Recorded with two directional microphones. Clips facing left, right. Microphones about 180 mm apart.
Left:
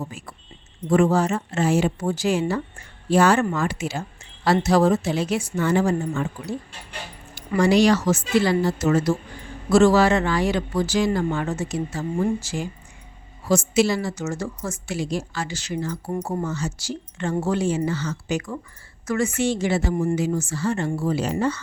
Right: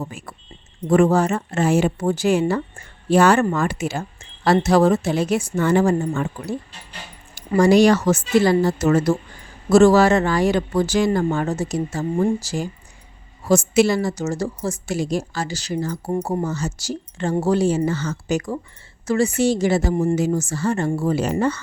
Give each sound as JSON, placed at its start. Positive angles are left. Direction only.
{"t": 0.0, "sound": "speech", "side_deg": -60}
{"t": 7.5, "sound": "a woman's voice", "side_deg": -45}
{"t": 13.5, "sound": "a woman's voice", "side_deg": -50}
{"t": 19.0, "sound": "a woman's voice", "side_deg": -30}